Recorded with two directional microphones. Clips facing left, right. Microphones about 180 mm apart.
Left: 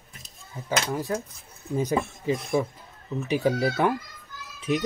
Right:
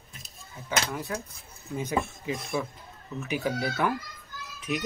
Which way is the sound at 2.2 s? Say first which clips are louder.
Left 6 dB; 35° left (ahead or behind).